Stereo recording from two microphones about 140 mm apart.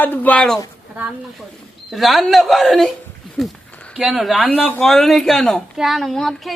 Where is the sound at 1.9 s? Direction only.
Centre (ahead or behind).